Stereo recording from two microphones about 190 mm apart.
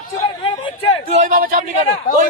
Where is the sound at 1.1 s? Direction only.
45° right (ahead or behind).